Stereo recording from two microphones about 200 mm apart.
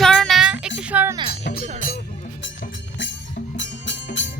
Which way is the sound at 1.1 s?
25° right (ahead or behind).